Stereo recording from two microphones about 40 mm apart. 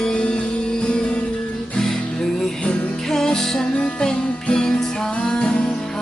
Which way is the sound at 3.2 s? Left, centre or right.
Centre.